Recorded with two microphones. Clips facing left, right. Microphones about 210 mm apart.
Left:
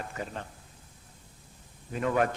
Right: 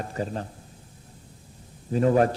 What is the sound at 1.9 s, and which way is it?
Speech, 35° right (ahead or behind).